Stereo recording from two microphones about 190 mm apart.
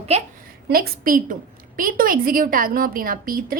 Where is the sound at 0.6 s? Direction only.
50° right (ahead or behind).